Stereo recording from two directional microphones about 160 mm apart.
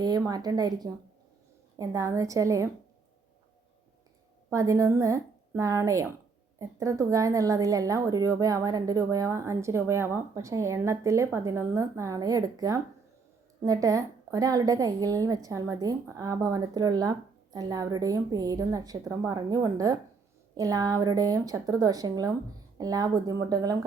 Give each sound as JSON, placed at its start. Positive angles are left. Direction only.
{"t": 0.0, "sound": "speech", "side_deg": -25}
{"t": 4.4, "sound": "speech", "side_deg": -20}